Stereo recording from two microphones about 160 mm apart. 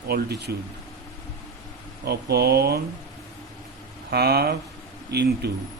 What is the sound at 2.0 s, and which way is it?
Speech, 85° right.